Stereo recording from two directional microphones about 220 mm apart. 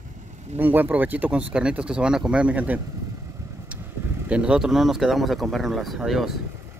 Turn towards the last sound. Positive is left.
turn(degrees=0)  # may be behind; listen again after turning